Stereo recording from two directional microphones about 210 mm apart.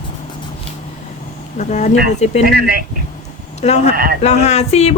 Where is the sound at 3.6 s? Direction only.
30° left (ahead or behind).